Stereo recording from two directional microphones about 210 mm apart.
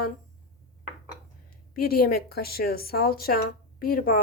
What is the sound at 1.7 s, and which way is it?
A woman's voice, 45° left (ahead or behind).